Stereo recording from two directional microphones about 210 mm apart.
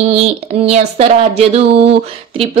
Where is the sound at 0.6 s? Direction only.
30° right (ahead or behind).